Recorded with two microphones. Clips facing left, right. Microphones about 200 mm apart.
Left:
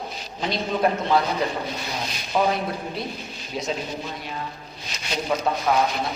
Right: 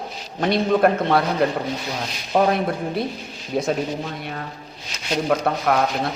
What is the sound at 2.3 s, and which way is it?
Speech, 60° right (ahead or behind).